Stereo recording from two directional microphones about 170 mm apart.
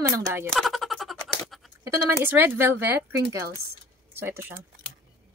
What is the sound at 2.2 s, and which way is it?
Speech, 10° right (ahead or behind).